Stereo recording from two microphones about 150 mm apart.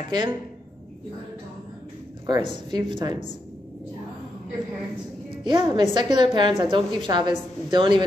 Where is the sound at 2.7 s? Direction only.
30° right (ahead or behind).